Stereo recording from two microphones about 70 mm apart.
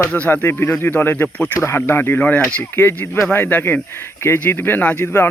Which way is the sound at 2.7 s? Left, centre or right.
Left.